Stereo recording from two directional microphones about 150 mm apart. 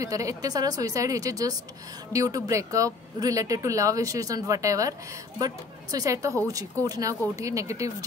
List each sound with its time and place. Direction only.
0.0 s speech: 20° right (ahead or behind)